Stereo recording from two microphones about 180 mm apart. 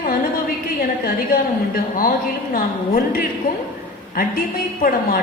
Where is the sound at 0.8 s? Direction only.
55° left (ahead or behind).